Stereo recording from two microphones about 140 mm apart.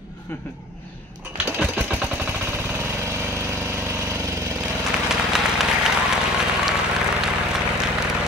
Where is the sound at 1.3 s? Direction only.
10° right (ahead or behind).